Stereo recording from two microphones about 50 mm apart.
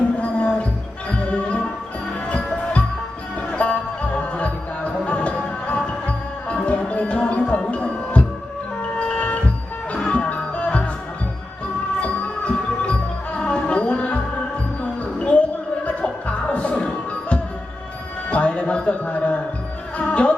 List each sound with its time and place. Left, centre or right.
0.0 s music: left
3.6 s music: left
11.9 s music: left
15.2 s music: left
18.3 s a sound: left
20.0 s music: left